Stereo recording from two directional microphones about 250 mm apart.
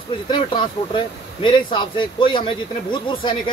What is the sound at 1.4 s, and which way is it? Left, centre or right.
Speech, centre.